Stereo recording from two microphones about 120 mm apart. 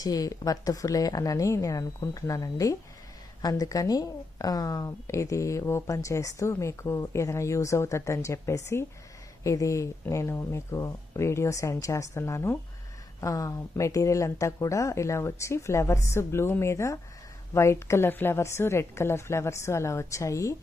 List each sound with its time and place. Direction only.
0.0 s a woman's voice: 30° left (ahead or behind)